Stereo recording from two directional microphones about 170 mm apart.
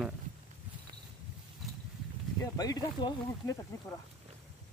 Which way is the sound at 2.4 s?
20° left (ahead or behind).